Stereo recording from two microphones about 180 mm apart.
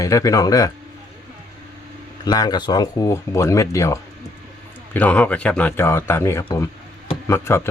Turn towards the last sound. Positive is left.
turn(degrees=15)  # may be behind; listen again after turning